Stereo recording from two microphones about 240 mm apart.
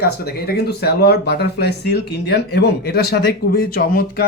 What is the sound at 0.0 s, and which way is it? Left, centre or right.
Speech, left.